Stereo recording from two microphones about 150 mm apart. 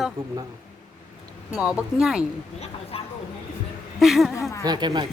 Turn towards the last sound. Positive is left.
turn(degrees=-30)  # may be behind; listen again after turning